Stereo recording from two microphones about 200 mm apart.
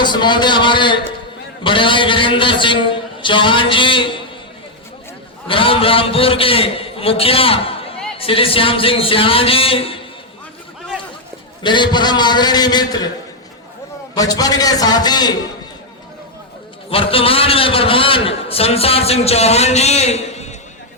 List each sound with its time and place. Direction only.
0.0 s a man's voice: 20° left (ahead or behind)
5.5 s a man's voice: 25° left (ahead or behind)
11.6 s a man's voice: 25° left (ahead or behind)
14.2 s a man's voice: 20° left (ahead or behind)
16.9 s a man's voice: 30° left (ahead or behind)